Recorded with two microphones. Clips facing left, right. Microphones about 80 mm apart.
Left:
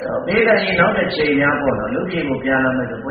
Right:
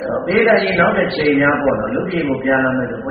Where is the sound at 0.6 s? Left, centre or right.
Right.